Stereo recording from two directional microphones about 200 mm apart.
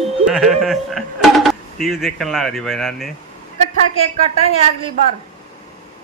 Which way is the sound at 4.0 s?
30° right (ahead or behind).